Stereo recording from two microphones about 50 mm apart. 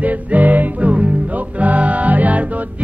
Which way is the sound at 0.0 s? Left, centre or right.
Right.